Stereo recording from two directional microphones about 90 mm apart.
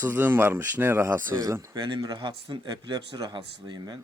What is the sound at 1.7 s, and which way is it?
Speech, 55° right (ahead or behind).